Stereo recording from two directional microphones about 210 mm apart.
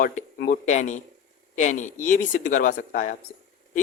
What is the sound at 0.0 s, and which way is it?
Speech, 45° left (ahead or behind).